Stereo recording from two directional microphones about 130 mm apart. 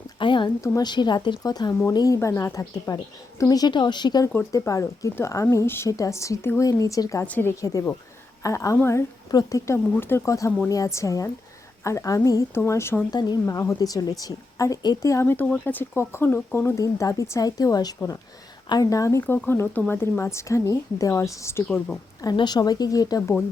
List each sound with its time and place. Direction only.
0.2 s speech: 40° left (ahead or behind); by 13.0 s 20° left (ahead or behind)
13.1 s speech: 30° left (ahead or behind); by 19.6 s 15° left (ahead or behind)
19.6 s speech: 5° left (ahead or behind)
19.9 s speech: 15° left (ahead or behind)
22.2 s speech: 30° left (ahead or behind)